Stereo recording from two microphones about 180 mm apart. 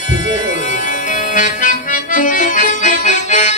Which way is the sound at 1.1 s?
45° left (ahead or behind).